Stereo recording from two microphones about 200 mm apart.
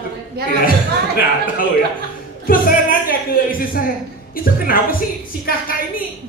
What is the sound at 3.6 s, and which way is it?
A woman's voice, 45° left (ahead or behind).